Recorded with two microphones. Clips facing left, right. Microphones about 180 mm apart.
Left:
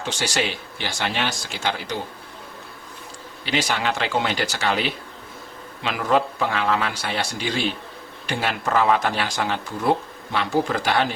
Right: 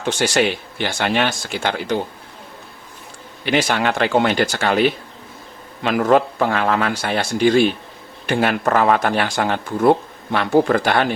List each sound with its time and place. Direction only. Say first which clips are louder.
0.0 s speech: right 7 dB; 55° right (ahead or behind)
3.4 s a man's voice: right 5 dB; 55° right (ahead or behind)